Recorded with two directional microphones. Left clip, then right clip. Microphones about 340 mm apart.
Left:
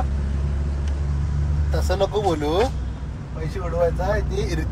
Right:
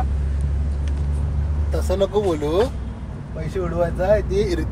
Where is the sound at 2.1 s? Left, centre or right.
Left.